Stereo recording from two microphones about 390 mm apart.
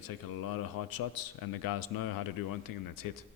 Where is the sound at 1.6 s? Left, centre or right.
Left.